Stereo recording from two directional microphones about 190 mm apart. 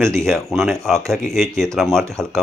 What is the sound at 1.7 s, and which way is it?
Speech, centre (ahead or behind).